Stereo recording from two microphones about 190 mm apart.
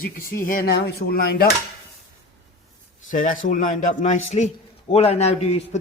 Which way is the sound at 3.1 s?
45° left (ahead or behind).